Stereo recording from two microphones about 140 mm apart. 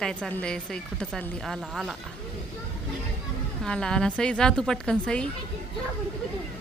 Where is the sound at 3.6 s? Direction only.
5° left (ahead or behind).